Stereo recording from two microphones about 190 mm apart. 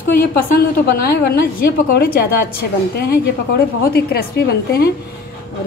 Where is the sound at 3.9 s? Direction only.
55° left (ahead or behind).